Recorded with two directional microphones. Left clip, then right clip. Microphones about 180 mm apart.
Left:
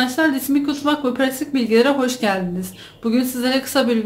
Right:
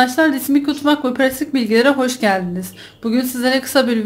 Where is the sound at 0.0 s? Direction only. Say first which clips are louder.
Right 4 dB; 30° right (ahead or behind).